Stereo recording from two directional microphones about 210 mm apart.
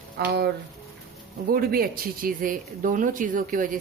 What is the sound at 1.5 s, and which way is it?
Speech, 45° right (ahead or behind).